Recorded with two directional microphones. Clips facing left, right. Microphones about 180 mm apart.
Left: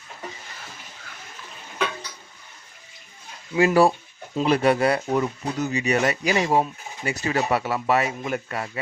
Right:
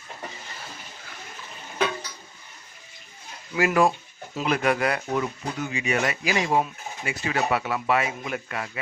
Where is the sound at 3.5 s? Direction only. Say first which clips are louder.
Left 4 dB; 30° left (ahead or behind).